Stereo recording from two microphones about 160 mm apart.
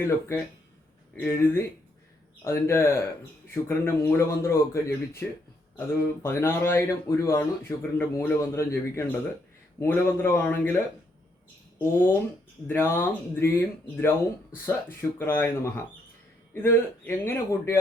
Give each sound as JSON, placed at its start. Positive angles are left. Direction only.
{"t": 0.0, "sound": "speech", "side_deg": 15}
{"t": 11.8, "sound": "speech", "side_deg": 15}